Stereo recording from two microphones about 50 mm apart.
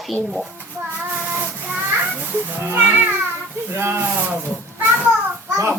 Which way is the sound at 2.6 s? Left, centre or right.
Right.